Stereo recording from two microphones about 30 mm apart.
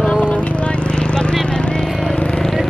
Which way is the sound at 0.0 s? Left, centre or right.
Left.